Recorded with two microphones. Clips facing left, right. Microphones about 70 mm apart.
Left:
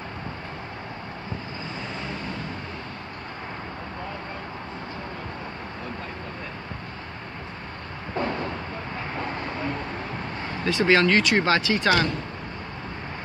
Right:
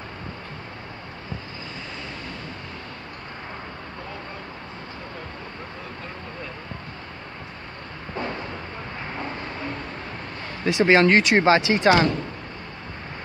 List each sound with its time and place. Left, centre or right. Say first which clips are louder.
10.6 s speech: right 3 dB; right